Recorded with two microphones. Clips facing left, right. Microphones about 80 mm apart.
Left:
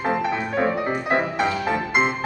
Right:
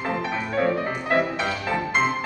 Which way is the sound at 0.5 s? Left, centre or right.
Left.